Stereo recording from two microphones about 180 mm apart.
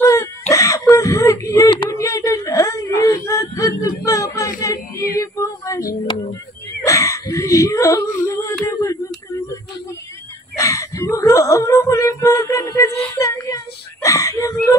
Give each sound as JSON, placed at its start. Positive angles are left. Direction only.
{"t": 0.0, "sound": "wail", "side_deg": 20}
{"t": 0.5, "sound": "whimper", "side_deg": 20}
{"t": 4.6, "sound": "female singing", "side_deg": 20}
{"t": 6.8, "sound": "wail", "side_deg": 20}
{"t": 8.3, "sound": "a sound", "side_deg": 20}
{"t": 10.6, "sound": "wail", "side_deg": 15}
{"t": 13.2, "sound": "child singing", "side_deg": 15}
{"t": 14.0, "sound": "whimper", "side_deg": 20}